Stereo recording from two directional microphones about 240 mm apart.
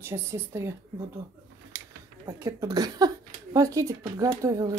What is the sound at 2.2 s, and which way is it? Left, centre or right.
Speech, centre.